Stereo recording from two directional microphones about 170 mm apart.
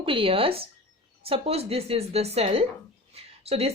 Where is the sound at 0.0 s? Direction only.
30° right (ahead or behind).